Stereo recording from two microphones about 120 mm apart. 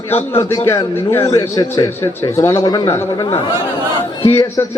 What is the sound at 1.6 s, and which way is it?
A man's voice, 25° left (ahead or behind).